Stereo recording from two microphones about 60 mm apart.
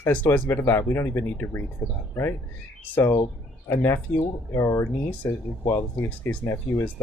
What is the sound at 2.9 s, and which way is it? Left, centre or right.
Speech, left.